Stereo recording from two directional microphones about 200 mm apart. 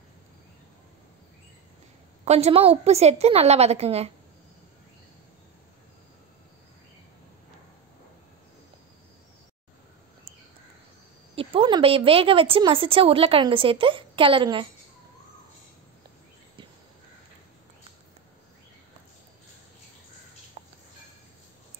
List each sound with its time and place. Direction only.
2.2 s a woman's voice: 30° right (ahead or behind)
11.3 s a woman's voice: 25° right (ahead or behind)
20.6 s a sound: 25° right (ahead or behind)